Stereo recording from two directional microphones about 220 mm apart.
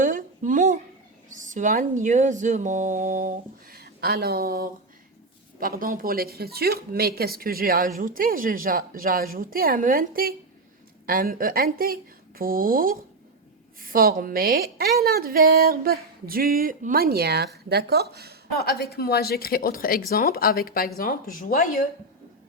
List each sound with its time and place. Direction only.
0.0 s a sound: 35° right (ahead or behind)
1.3 s a woman's voice: 35° right (ahead or behind)
18.5 s a woman's voice: 45° left (ahead or behind)